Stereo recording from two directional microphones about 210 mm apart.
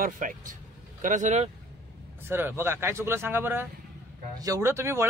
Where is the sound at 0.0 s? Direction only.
40° right (ahead or behind).